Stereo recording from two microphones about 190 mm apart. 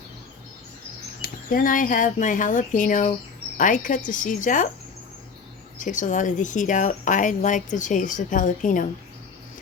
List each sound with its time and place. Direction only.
1.2 s speech: 50° left (ahead or behind)
5.7 s speech: 40° left (ahead or behind)